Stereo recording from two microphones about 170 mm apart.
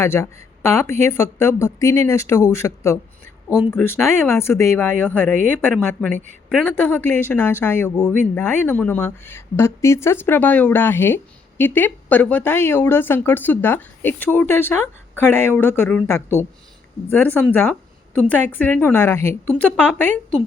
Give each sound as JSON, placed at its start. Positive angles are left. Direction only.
{"t": 0.0, "sound": "a woman's voice", "side_deg": 15}
{"t": 17.1, "sound": "a woman's voice", "side_deg": 10}